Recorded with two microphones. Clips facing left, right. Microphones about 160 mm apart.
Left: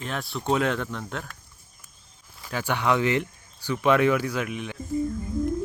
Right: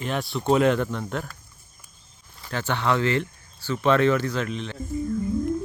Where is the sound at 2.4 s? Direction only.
10° left (ahead or behind).